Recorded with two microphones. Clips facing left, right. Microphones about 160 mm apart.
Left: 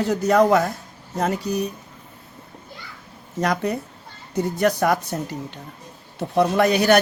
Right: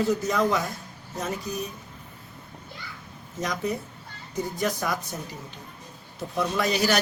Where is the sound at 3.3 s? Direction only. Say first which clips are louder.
Left 6 dB; 70° left (ahead or behind).